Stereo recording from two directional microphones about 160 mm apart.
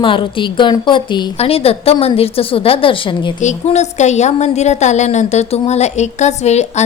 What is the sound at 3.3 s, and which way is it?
A woman's voice, 45° left (ahead or behind).